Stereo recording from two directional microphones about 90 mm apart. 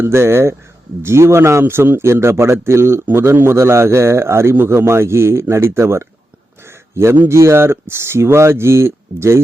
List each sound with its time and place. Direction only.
0.0 s a man's voice: 30° right (ahead or behind)